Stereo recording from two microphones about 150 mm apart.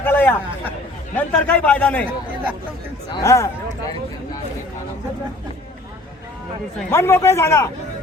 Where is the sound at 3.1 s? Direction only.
20° left (ahead or behind).